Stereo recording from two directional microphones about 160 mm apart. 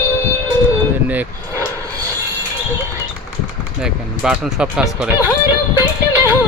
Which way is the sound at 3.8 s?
5° right (ahead or behind).